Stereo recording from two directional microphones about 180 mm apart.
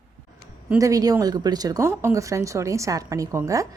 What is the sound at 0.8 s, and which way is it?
Speech, 20° right (ahead or behind).